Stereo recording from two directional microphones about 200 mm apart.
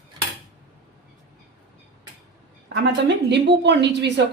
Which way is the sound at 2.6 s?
60° right (ahead or behind).